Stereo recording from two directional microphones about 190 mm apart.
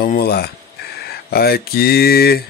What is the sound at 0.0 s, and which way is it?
Speech, 50° left (ahead or behind).